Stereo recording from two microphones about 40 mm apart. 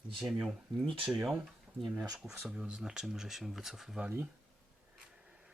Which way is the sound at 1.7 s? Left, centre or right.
Right.